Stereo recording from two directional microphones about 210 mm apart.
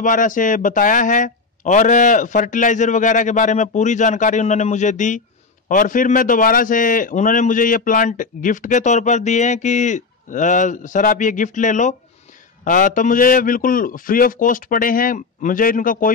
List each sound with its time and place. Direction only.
0.0 s a man's voice: 40° left (ahead or behind)